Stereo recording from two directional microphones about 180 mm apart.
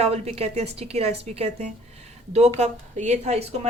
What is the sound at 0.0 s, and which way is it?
Speech, 35° right (ahead or behind).